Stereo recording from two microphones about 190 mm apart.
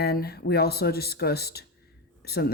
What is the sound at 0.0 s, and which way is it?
Speech, 55° left (ahead or behind).